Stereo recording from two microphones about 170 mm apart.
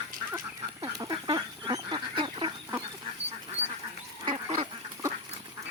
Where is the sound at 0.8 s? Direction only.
25° right (ahead or behind).